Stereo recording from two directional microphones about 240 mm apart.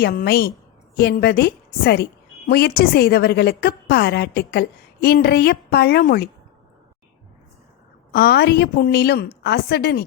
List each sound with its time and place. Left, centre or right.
0.0 s a woman's voice: left
8.1 s a woman's voice: left